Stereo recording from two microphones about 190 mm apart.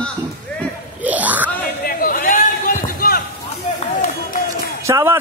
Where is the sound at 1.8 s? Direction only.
50° left (ahead or behind).